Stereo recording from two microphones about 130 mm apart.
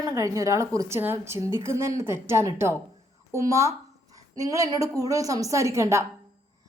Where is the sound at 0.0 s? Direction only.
25° right (ahead or behind).